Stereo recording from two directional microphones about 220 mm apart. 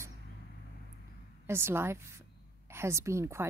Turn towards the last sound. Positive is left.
turn(degrees=-10)  # may be behind; listen again after turning